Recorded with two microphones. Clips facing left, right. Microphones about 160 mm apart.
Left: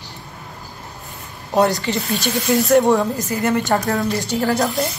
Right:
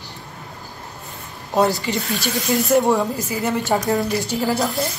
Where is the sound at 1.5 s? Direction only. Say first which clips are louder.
Left 1 dB; centre (ahead or behind).